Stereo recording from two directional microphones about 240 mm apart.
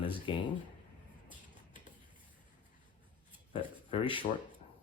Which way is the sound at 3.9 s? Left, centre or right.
Left.